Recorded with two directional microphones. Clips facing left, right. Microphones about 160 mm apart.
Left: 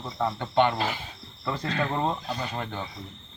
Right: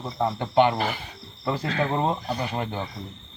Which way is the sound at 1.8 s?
20° right (ahead or behind).